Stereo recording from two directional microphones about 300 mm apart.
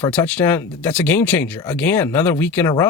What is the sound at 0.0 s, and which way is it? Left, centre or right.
Speech, centre.